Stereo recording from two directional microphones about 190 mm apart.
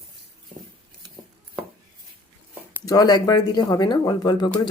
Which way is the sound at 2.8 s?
20° left (ahead or behind).